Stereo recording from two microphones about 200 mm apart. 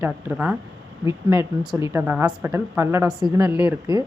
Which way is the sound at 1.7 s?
15° right (ahead or behind).